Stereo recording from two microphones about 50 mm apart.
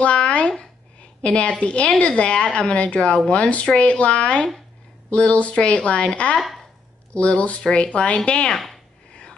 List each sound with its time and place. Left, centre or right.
0.0 s a woman's voice: left
6.3 s speech: centre
7.2 s a woman's voice: left